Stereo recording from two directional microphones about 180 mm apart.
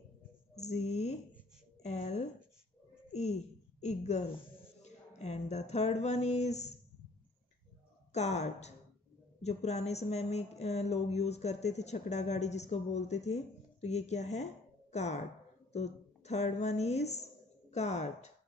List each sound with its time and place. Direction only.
0.6 s a woman's voice: 40° left (ahead or behind)
4.8 s a sound: 35° left (ahead or behind)
8.1 s a woman's voice: 40° left (ahead or behind)